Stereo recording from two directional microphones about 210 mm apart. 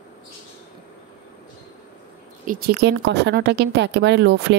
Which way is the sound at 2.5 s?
45° right (ahead or behind).